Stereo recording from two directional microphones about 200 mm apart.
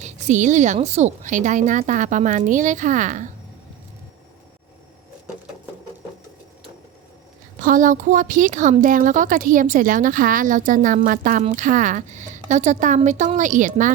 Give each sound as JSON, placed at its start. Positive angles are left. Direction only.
{"t": 0.0, "sound": "a woman's voice", "side_deg": -35}
{"t": 7.6, "sound": "a woman's voice", "side_deg": -40}